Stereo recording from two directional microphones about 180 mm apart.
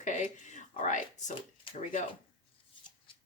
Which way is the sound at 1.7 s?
30° left (ahead or behind).